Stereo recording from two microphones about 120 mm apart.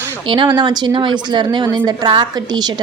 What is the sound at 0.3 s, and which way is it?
Speech, 40° right (ahead or behind).